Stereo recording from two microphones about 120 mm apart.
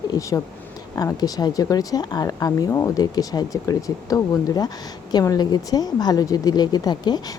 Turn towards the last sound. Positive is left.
turn(degrees=35)  # may be behind; listen again after turning